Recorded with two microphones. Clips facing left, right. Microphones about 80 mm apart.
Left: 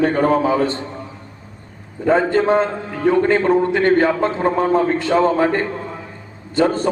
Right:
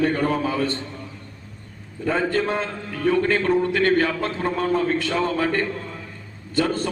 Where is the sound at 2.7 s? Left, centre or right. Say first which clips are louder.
Left 5 dB; left.